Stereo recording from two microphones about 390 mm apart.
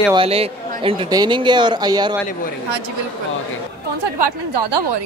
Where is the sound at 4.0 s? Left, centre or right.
Right.